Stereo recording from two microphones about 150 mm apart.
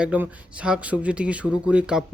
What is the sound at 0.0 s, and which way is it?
A man's voice, 10° right (ahead or behind).